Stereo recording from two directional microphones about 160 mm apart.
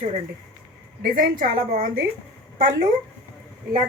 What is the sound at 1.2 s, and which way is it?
Speech, 60° right (ahead or behind).